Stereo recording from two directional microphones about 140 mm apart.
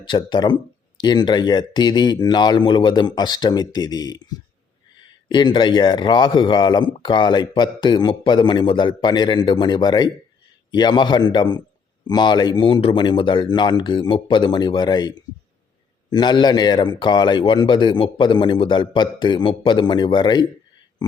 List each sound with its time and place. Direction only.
0.0 s speech: 35° left (ahead or behind)